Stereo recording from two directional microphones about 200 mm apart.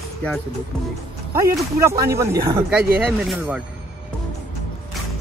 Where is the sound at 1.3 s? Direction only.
15° right (ahead or behind).